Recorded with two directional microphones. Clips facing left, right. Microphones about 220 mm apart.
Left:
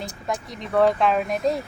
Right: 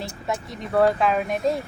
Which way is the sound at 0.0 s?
Centre (ahead or behind).